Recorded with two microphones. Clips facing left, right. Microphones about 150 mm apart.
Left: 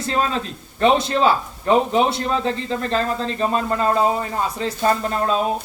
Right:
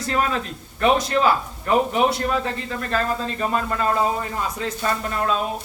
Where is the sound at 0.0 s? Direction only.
25° left (ahead or behind).